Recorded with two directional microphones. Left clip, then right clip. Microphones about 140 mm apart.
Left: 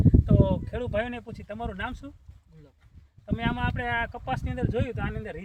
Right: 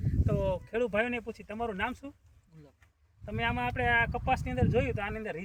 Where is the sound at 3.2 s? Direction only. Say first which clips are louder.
Left 2 dB; 20° right (ahead or behind).